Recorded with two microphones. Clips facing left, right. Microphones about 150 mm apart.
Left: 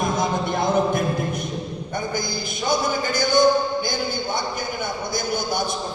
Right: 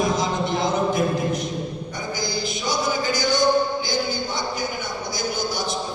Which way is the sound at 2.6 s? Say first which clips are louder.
Left 2 dB; 55° left (ahead or behind).